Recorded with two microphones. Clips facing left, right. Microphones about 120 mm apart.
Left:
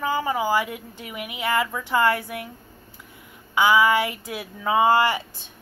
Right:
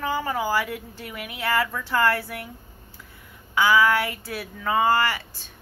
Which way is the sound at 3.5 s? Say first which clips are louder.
Left 1 dB; 15° left (ahead or behind).